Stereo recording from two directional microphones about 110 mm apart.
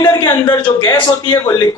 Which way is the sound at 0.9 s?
45° left (ahead or behind).